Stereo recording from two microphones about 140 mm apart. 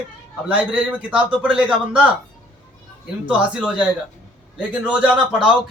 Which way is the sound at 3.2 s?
5° right (ahead or behind).